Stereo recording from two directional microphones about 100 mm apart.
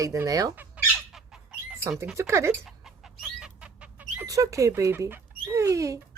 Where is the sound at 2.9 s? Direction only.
5° right (ahead or behind).